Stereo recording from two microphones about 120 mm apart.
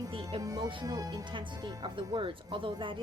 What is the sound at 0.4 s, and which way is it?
Speech, 30° right (ahead or behind).